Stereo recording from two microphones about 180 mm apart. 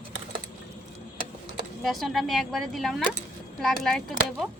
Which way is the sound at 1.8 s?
Centre (ahead or behind).